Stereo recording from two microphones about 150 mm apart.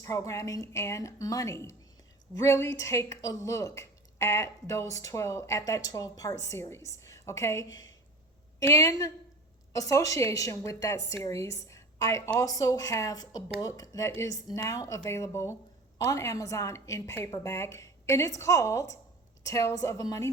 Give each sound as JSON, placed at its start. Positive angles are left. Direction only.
{"t": 0.0, "sound": "speech", "side_deg": 20}